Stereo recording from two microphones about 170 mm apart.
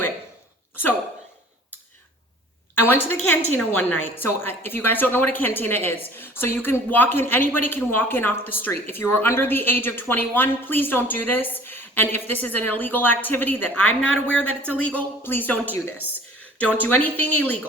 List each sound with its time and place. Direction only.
2.8 s speech: 10° left (ahead or behind)